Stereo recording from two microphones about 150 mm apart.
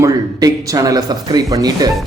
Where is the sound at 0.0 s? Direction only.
25° right (ahead or behind).